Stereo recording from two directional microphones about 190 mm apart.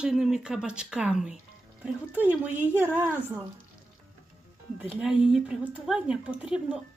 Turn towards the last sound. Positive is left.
turn(degrees=-5)  # may be behind; listen again after turning